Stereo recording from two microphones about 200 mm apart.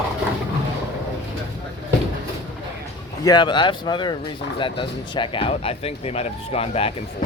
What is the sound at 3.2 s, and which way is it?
Speech, 20° left (ahead or behind).